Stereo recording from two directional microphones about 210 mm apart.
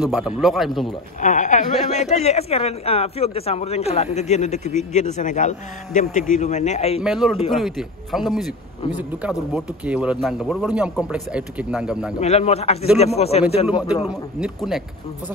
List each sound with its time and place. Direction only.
0.0 s a man's voice: 5° right (ahead or behind)
1.2 s speech: 35° left (ahead or behind)
7.0 s a man's voice: centre (ahead or behind)
12.2 s speech: 30° left (ahead or behind)
14.0 s a man's voice: centre (ahead or behind)